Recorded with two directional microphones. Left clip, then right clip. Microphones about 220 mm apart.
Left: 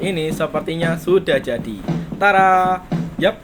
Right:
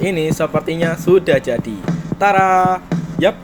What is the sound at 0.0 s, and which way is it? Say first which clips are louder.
Speech: right 3 dB; 25° right (ahead or behind).